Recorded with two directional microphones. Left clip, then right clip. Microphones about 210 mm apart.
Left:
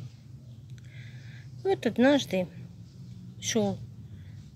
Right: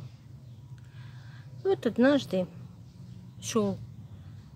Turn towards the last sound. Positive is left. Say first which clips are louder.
# left 1 dB
turn(degrees=-15)  # may be behind; listen again after turning